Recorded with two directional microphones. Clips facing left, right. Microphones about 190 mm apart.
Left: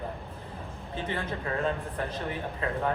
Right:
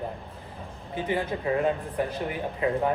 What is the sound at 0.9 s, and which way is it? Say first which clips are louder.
Speech: right 5 dB; 15° right (ahead or behind).